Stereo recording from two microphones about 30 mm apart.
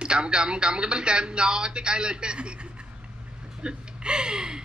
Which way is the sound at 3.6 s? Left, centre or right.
Right.